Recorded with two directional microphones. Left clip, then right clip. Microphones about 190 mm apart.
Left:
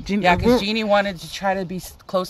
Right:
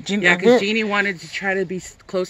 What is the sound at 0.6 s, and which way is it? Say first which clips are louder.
Speech: left 1 dB; 45° left (ahead or behind).